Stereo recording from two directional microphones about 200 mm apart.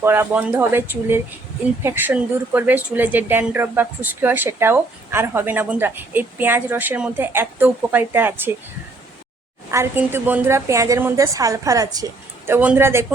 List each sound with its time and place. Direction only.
0.0 s speech: 10° right (ahead or behind)
9.7 s speech: 10° right (ahead or behind)